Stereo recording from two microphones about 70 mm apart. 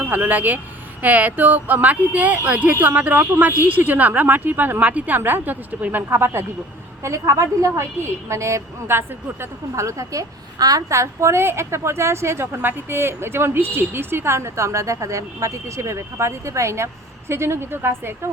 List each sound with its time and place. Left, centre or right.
0.0 s speech: right
6.1 s a woman's voice: right
7.0 s speech: right
9.8 s speech: right
10.8 s a woman's voice: right